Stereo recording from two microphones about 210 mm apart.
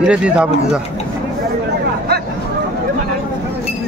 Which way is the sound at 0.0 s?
5° right (ahead or behind).